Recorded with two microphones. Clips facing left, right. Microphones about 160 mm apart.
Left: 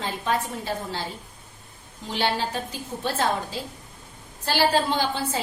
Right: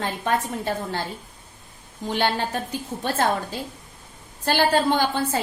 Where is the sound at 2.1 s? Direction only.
55° right (ahead or behind).